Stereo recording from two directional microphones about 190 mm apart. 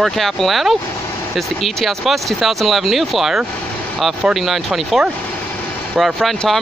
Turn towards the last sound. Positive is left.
turn(degrees=0)  # may be behind; listen again after turning